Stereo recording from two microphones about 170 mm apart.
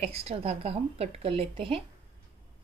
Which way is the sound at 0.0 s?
35° right (ahead or behind).